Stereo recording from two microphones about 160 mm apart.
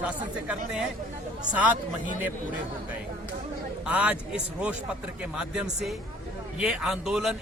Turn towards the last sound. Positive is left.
turn(degrees=-5)  # may be behind; listen again after turning